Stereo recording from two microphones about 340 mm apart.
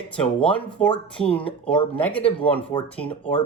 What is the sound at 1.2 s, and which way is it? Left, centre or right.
Speech, centre.